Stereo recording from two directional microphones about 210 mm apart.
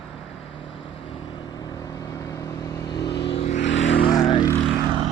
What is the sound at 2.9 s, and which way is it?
Vehicle, 55° left (ahead or behind).